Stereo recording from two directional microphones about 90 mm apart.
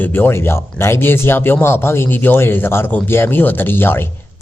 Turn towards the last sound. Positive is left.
turn(degrees=25)  # may be behind; listen again after turning